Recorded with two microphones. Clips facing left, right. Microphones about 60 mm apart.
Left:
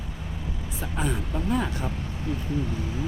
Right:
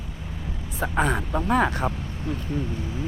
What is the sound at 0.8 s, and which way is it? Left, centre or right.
Speech, right.